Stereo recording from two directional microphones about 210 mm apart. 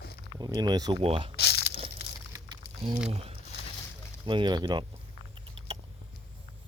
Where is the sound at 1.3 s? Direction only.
50° left (ahead or behind).